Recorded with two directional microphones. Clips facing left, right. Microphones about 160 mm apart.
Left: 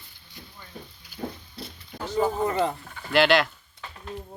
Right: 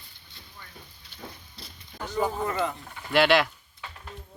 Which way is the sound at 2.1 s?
20° left (ahead or behind).